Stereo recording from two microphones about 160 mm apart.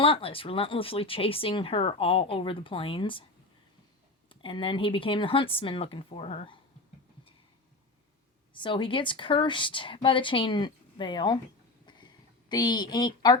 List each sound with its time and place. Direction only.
0.0 s speech: 35° left (ahead or behind)
4.3 s speech: 35° left (ahead or behind)
8.5 s speech: 30° left (ahead or behind)
11.9 s a sound: 25° left (ahead or behind)